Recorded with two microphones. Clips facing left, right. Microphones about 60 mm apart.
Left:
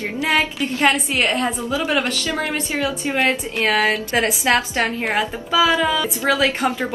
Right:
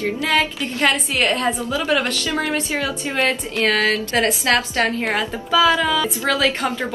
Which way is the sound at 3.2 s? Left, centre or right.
Centre.